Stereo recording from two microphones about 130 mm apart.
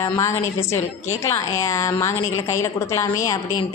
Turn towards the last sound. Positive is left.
turn(degrees=25)  # may be behind; listen again after turning